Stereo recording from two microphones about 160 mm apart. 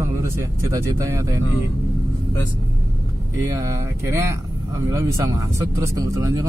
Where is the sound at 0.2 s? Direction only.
20° right (ahead or behind).